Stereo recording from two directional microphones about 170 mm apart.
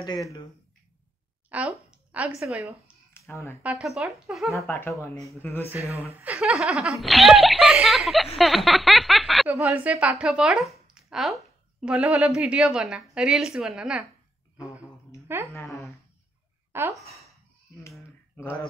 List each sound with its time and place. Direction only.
0.0 s speech: 20° left (ahead or behind)
1.5 s a woman's voice: 10° right (ahead or behind)
3.1 s a sound: 15° left (ahead or behind)
3.6 s speech: 5° right (ahead or behind)
4.6 s speech: 10° left (ahead or behind)
6.1 s a woman's voice: 10° right (ahead or behind)
15.3 s a woman's voice: 15° right (ahead or behind)
15.6 s a woman's voice: centre (ahead or behind)
16.7 s speech: 15° right (ahead or behind)
17.9 s a sound: 10° left (ahead or behind)